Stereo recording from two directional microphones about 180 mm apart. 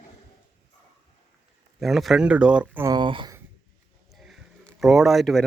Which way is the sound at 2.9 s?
25° right (ahead or behind).